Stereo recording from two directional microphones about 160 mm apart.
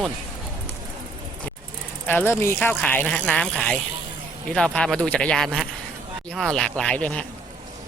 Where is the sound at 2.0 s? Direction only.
15° left (ahead or behind).